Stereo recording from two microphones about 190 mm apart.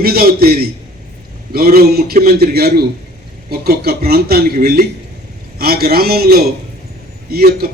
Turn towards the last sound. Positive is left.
turn(degrees=-55)  # may be behind; listen again after turning